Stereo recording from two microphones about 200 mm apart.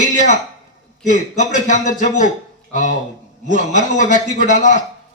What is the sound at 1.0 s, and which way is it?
Speech, 40° left (ahead or behind).